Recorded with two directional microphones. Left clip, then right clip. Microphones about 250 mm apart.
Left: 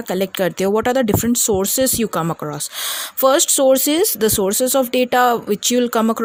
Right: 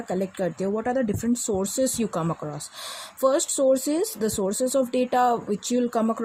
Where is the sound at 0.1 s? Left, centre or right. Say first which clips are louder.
Left 8 dB; left.